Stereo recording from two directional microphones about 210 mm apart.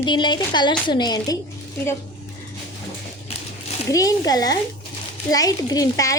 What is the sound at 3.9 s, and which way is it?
A child's voice, 15° left (ahead or behind).